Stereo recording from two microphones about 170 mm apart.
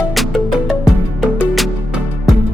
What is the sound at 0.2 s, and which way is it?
Music, 5° right (ahead or behind).